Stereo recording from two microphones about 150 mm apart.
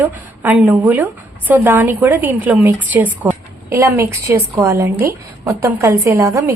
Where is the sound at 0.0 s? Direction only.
10° right (ahead or behind).